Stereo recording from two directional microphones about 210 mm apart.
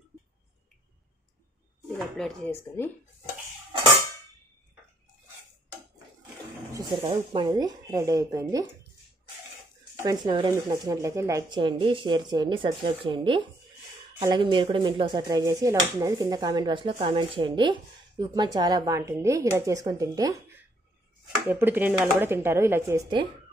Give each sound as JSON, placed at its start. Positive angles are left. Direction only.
{"t": 2.0, "sound": "speech", "side_deg": 0}
{"t": 7.1, "sound": "speech", "side_deg": -20}
{"t": 10.0, "sound": "speech", "side_deg": -20}